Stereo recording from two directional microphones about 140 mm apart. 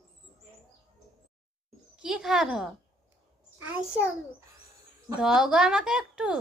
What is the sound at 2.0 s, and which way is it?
Speech, 5° right (ahead or behind).